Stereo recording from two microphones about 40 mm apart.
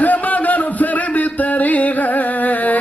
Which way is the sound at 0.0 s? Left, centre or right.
Left.